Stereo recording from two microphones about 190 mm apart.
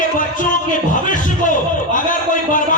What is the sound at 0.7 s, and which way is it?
Music, 45° left (ahead or behind).